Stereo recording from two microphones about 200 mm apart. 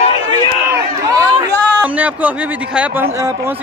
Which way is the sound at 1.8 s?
10° right (ahead or behind).